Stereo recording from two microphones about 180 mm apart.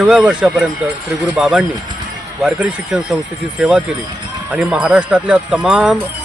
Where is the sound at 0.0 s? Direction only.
5° right (ahead or behind).